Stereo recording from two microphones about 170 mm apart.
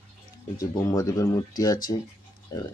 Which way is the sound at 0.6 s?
20° left (ahead or behind).